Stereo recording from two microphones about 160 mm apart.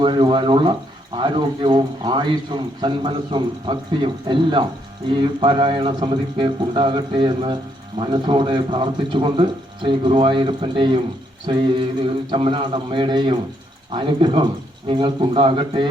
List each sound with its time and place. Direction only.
0.0 s speech: 30° right (ahead or behind)